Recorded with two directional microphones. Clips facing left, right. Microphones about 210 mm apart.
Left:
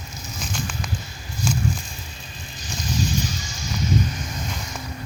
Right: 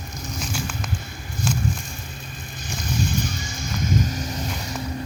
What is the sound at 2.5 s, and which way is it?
Vehicle, 55° right (ahead or behind).